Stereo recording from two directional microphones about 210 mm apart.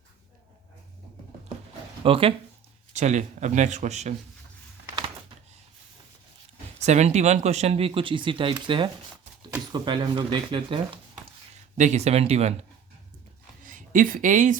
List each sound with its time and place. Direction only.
2.0 s speech: 25° right (ahead or behind)
6.7 s speech: 30° right (ahead or behind)
13.7 s speech: 40° right (ahead or behind)